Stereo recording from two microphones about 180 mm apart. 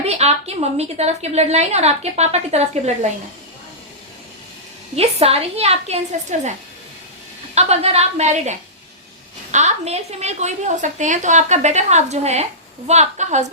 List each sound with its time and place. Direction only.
0.0 s a woman's voice: 35° right (ahead or behind)
4.9 s a woman's voice: 35° right (ahead or behind)
7.5 s a woman's voice: 35° right (ahead or behind)